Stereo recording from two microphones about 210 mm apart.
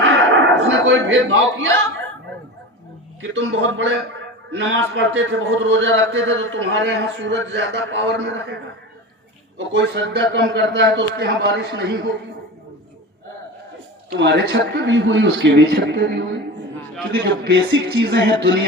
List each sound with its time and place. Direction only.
0.0 s a sound: 65° right (ahead or behind)
3.2 s a man's voice: 65° right (ahead or behind)
9.6 s a man's voice: 55° right (ahead or behind)
14.1 s a man's voice: 55° right (ahead or behind)